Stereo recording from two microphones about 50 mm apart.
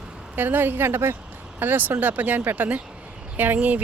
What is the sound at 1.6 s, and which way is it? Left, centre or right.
Speech, right.